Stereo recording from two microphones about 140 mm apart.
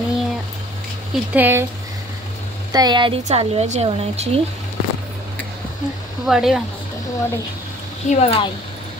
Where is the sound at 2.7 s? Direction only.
30° right (ahead or behind).